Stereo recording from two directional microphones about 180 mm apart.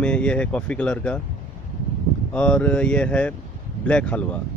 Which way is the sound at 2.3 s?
5° left (ahead or behind).